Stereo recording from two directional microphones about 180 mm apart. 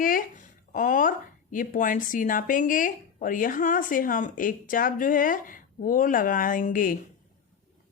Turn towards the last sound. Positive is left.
turn(degrees=50)  # may be behind; listen again after turning